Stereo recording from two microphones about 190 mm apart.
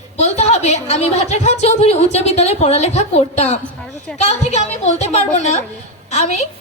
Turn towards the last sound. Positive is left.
turn(degrees=35)  # may be behind; listen again after turning